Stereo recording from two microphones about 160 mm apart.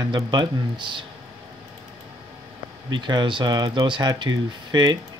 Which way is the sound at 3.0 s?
30° right (ahead or behind).